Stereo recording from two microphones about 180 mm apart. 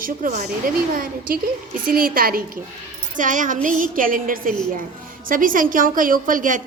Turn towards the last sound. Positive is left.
turn(degrees=-45)  # may be behind; listen again after turning